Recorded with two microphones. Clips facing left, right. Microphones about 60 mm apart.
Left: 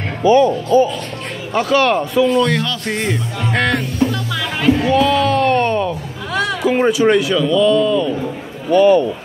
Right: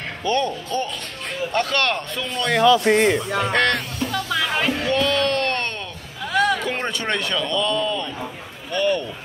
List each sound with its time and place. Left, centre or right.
0.2 s speech: centre
3.5 s speech: centre
4.8 s a sound: centre
8.7 s speech: centre